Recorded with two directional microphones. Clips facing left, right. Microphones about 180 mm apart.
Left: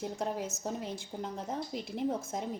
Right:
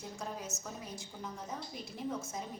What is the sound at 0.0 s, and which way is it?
A woman's voice, 65° left (ahead or behind).